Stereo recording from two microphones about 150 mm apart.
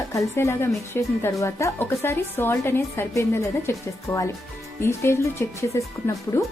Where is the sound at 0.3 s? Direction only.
15° left (ahead or behind).